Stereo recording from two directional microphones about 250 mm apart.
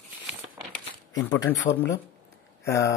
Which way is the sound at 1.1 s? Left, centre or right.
Centre.